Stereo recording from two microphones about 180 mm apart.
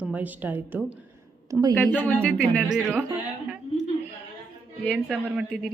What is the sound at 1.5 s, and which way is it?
Speech, 20° right (ahead or behind).